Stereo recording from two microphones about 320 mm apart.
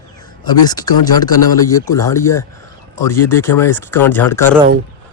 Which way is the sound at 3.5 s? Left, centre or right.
Centre.